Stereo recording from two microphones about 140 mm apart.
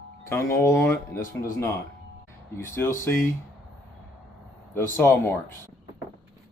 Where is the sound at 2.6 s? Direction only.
15° left (ahead or behind).